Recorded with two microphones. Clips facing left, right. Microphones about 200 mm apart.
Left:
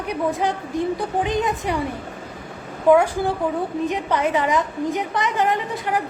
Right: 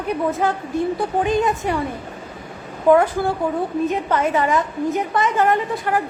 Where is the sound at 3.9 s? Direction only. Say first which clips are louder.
Right 1 dB; 15° left (ahead or behind).